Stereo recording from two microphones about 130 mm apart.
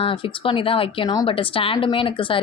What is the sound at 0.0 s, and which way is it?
A woman's voice, 40° left (ahead or behind).